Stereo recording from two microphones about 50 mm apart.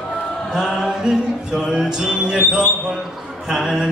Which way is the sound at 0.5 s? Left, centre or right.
Centre.